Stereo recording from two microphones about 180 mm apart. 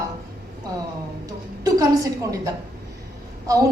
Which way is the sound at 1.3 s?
20° right (ahead or behind).